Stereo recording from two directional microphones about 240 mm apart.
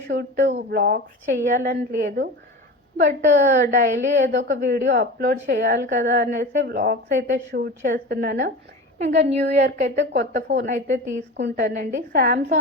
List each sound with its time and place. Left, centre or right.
0.1 s a sound: right
0.7 s a woman's voice: right
4.3 s a woman's voice: right
9.7 s a woman's voice: right
11.3 s a woman's voice: right